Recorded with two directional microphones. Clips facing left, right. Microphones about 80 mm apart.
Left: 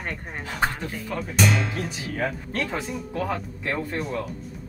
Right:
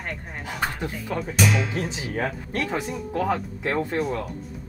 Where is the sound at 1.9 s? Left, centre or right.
Right.